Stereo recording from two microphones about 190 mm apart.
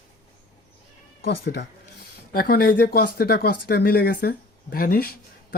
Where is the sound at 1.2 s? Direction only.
55° left (ahead or behind).